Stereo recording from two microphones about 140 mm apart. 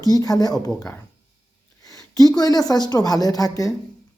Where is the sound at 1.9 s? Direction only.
25° left (ahead or behind).